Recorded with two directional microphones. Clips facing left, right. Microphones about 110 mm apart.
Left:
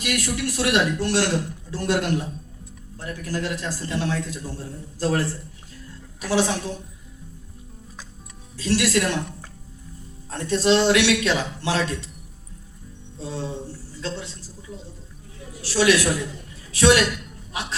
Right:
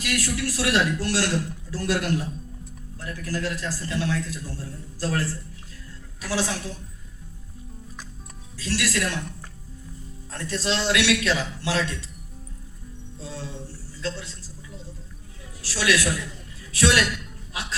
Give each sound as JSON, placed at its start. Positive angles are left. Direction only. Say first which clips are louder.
{"t": 0.0, "sound": "a man's voice", "louder": "left 2 dB", "side_deg": 20}
{"t": 8.5, "sound": "a man's voice", "louder": "left 6 dB", "side_deg": 25}
{"t": 10.2, "sound": "a man's voice", "louder": "left 8 dB", "side_deg": 20}
{"t": 13.2, "sound": "a man's voice", "louder": "left 6 dB", "side_deg": 25}
{"t": 17.5, "sound": "a sound", "louder": "left 3 dB", "side_deg": 25}